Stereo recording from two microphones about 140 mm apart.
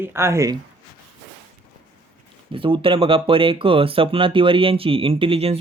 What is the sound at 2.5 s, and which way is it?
Speech, 40° right (ahead or behind).